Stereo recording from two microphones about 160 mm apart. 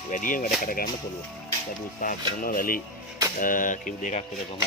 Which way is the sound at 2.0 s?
60° left (ahead or behind).